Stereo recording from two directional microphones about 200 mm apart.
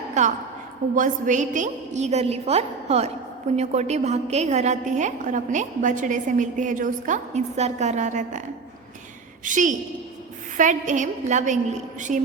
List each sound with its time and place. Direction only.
0.2 s a woman's voice: 35° right (ahead or behind)
9.4 s a woman's voice: 40° right (ahead or behind)